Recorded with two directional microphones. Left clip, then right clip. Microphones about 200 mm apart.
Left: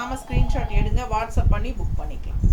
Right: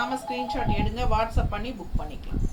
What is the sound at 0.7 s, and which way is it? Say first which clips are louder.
A woman's voice: right 1 dB; 15° left (ahead or behind).